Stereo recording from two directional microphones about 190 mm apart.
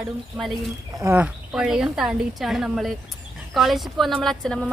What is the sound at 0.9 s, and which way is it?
A woman's voice, 10° right (ahead or behind).